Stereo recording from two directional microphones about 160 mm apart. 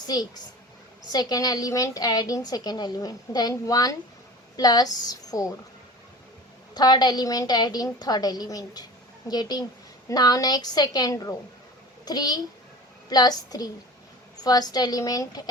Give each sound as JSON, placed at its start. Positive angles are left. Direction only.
{"t": 0.0, "sound": "a woman's voice", "side_deg": 25}
{"t": 6.7, "sound": "a woman's voice", "side_deg": 25}